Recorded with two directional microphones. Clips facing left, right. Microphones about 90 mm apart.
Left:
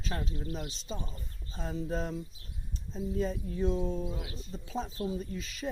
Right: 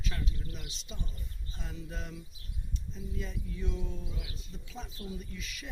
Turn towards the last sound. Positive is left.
turn(degrees=35)  # may be behind; listen again after turning